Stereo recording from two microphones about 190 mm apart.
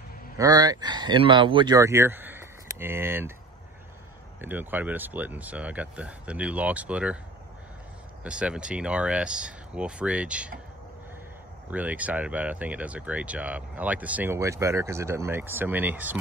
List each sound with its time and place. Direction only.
0.4 s speech: 20° right (ahead or behind)
4.4 s speech: 10° right (ahead or behind)
8.2 s speech: 5° right (ahead or behind)
11.7 s speech: 10° right (ahead or behind)